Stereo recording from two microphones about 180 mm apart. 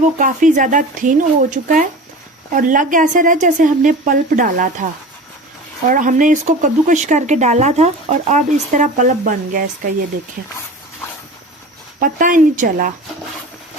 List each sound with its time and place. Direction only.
0.0 s speech: 45° right (ahead or behind)
5.9 s speech: 45° right (ahead or behind)
11.9 s speech: 50° right (ahead or behind)